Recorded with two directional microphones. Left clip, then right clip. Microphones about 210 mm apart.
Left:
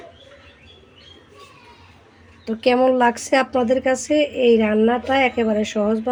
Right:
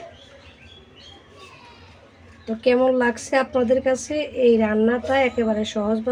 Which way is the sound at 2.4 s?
40° left (ahead or behind).